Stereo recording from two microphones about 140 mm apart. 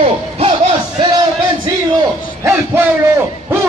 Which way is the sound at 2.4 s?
20° right (ahead or behind).